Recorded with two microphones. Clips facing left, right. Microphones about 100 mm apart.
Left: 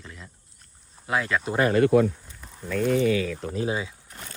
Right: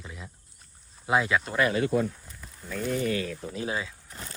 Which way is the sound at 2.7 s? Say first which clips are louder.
Left 7 dB; 80° left.